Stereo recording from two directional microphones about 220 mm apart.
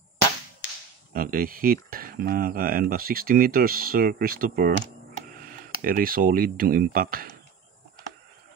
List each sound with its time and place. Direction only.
1.1 s speech: 40° right (ahead or behind)